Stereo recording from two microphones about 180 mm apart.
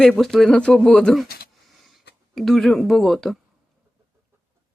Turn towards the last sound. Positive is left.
turn(degrees=0)  # may be behind; listen again after turning